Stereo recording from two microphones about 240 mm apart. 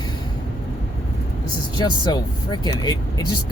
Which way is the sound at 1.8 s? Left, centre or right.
Centre.